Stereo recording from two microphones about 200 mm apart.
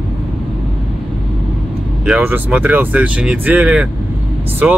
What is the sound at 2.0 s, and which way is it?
Speech, 10° right (ahead or behind).